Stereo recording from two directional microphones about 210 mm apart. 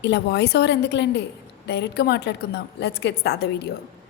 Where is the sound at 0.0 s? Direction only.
55° left (ahead or behind).